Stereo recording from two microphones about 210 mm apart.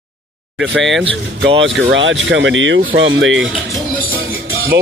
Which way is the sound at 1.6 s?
60° right (ahead or behind).